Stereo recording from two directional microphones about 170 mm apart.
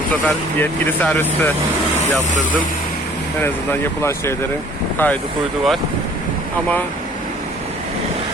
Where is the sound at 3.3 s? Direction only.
15° left (ahead or behind).